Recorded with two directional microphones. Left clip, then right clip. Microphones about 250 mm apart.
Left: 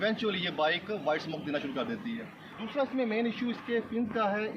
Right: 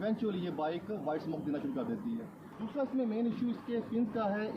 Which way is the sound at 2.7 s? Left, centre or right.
Centre.